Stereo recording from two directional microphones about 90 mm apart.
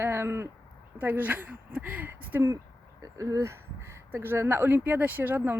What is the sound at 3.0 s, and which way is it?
Speech, 40° right (ahead or behind).